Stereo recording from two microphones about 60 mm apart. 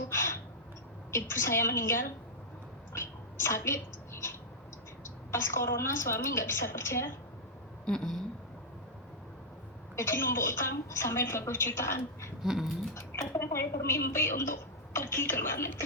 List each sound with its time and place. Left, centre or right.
1.1 s a woman's voice: left
2.9 s a sound: left
5.0 s a woman's voice: left
7.9 s a sound: centre
9.9 s a woman's voice: left
12.4 s speech: centre
13.4 s a woman's voice: left